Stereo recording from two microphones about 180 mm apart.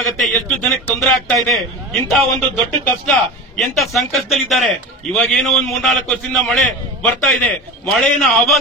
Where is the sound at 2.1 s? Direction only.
Centre (ahead or behind).